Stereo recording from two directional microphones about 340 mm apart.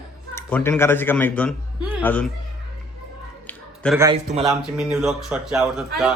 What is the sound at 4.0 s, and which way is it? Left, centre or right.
A man's voice, centre.